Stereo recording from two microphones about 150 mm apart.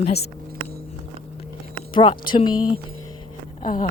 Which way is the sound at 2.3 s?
35° left (ahead or behind).